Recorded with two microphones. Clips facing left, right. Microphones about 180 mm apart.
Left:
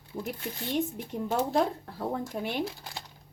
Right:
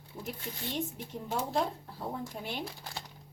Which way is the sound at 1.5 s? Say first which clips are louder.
Left 5 dB; 65° left (ahead or behind).